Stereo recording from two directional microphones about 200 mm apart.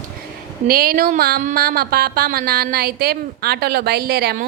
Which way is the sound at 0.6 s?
45° right (ahead or behind).